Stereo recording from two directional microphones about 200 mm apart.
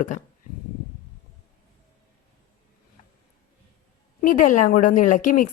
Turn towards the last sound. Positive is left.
turn(degrees=40)  # may be behind; listen again after turning